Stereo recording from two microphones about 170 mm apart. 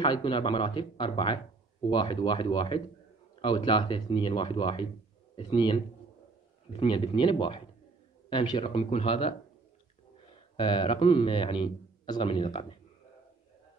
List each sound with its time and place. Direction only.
0.0 s a man's voice: 30° left (ahead or behind)
6.8 s speech: 30° left (ahead or behind)
10.5 s speech: 30° left (ahead or behind)